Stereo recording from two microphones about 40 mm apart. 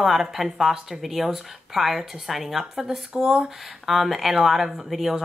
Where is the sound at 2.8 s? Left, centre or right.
Centre.